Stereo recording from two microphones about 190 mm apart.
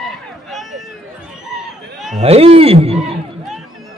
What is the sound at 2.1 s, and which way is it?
Speech, 30° right (ahead or behind).